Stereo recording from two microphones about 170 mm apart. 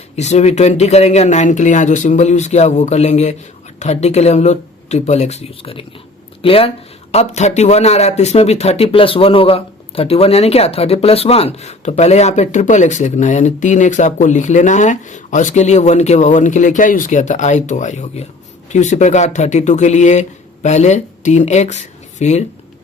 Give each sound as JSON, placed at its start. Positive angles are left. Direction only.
{"t": 0.2, "sound": "a man's voice", "side_deg": 40}